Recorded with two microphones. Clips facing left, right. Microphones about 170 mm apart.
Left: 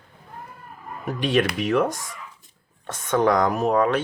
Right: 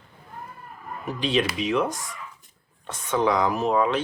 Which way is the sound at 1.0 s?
50° left (ahead or behind).